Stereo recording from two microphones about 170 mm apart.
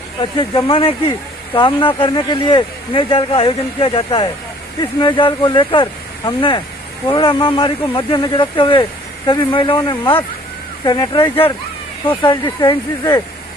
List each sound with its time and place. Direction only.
0.2 s speech: 30° left (ahead or behind)